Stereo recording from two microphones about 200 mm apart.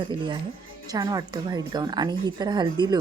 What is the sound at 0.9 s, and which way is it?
A woman's voice, 20° right (ahead or behind).